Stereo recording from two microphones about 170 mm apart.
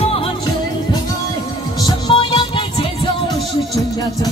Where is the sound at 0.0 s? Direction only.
35° left (ahead or behind).